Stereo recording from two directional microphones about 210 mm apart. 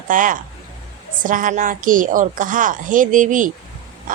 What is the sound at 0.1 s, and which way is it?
A woman's voice, 40° right (ahead or behind).